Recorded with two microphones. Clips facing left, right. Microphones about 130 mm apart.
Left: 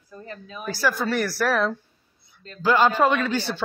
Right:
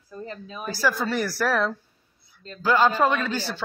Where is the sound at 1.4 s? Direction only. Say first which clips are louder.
Left 1 dB; 10° left (ahead or behind).